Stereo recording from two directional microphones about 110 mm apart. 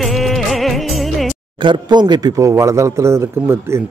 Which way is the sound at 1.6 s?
45° right (ahead or behind).